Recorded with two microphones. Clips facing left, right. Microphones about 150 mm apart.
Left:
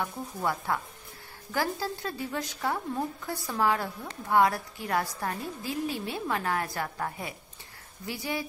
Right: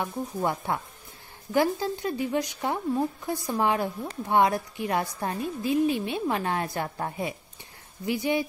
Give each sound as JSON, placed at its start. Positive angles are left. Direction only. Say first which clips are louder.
{"t": 0.0, "sound": "a woman's voice", "louder": "right 3 dB", "side_deg": -20}